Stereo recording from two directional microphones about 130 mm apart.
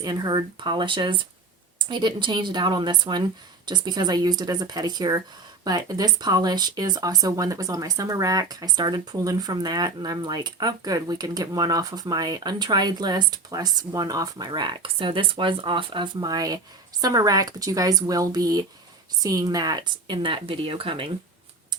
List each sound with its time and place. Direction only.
0.0 s speech: 35° right (ahead or behind)